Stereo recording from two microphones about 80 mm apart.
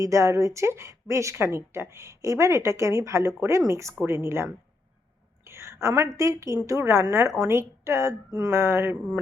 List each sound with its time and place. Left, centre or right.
0.0 s speech: right
5.5 s a sound: right
6.1 s speech: right